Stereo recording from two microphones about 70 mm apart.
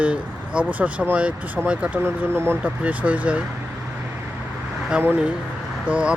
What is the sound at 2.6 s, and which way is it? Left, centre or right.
Speech, right.